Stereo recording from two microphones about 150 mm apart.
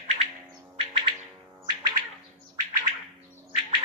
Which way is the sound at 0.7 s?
35° right (ahead or behind).